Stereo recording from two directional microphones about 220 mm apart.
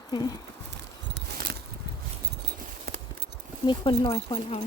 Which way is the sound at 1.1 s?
45° right (ahead or behind).